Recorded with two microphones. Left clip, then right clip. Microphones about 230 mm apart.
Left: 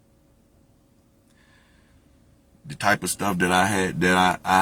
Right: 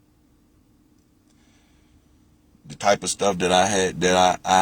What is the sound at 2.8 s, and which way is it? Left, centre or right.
Speech, left.